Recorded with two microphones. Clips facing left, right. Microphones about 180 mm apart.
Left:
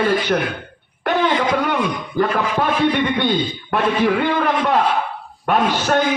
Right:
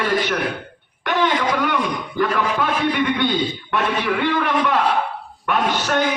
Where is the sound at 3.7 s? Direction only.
35° left (ahead or behind).